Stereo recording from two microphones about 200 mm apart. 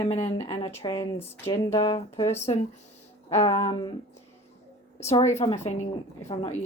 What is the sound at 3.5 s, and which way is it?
Speech, 20° left (ahead or behind).